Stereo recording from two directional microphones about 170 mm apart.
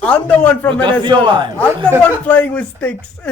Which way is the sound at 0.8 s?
30° right (ahead or behind).